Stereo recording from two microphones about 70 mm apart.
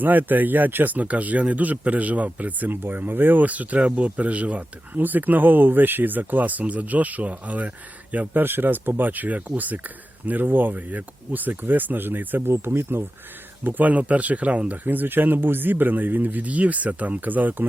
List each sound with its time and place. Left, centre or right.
0.0 s speech: right